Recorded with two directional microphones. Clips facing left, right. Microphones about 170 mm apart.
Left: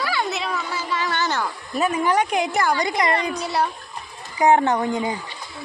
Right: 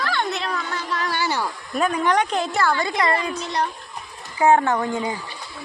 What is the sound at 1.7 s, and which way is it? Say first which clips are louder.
A woman's voice: even; 5° left (ahead or behind).